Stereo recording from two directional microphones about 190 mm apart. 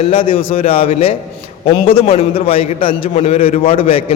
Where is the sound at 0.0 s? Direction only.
30° left (ahead or behind).